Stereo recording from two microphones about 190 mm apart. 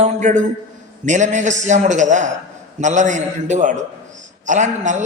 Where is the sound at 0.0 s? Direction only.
40° right (ahead or behind).